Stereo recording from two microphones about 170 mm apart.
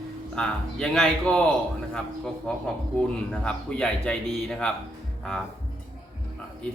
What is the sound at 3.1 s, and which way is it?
A man's voice, 5° left (ahead or behind).